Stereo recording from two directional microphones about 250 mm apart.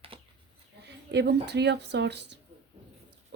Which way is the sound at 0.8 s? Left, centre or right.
Right.